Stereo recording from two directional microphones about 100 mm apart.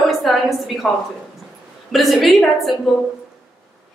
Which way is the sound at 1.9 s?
Centre (ahead or behind).